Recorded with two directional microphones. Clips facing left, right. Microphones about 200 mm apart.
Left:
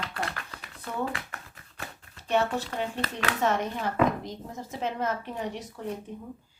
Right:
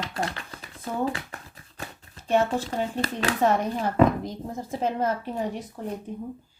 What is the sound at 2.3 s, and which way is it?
A woman's voice, 40° right (ahead or behind).